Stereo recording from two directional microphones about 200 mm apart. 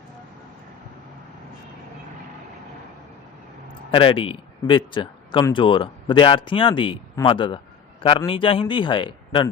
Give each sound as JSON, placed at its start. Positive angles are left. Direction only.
{"t": 3.9, "sound": "speech", "side_deg": 25}